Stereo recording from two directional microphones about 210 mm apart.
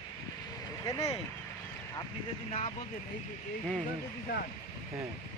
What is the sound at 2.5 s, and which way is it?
Speech, 25° left (ahead or behind).